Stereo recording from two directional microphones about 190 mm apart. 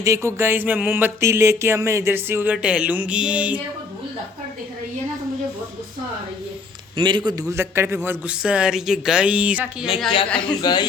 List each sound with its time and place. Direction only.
0.0 s a sound: 15° right (ahead or behind)
6.9 s a man's voice: 25° right (ahead or behind); by 9.6 s 5° right (ahead or behind)
10.2 s speech: 5° left (ahead or behind)
10.6 s speech: 25° left (ahead or behind)